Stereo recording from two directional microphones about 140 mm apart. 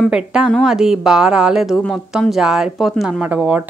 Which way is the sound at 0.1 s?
5° right (ahead or behind).